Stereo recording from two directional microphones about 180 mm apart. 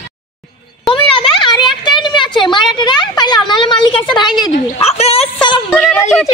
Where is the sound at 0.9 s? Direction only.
25° left (ahead or behind).